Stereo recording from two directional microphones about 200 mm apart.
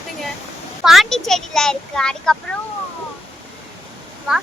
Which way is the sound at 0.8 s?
Centre (ahead or behind).